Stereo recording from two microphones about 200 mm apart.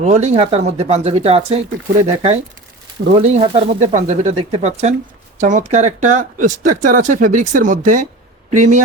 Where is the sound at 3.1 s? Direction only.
30° right (ahead or behind).